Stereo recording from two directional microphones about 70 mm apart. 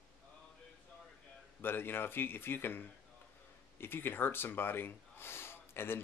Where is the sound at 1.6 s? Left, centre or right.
Left.